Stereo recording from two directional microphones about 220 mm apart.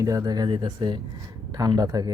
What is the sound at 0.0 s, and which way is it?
Speech, 15° right (ahead or behind).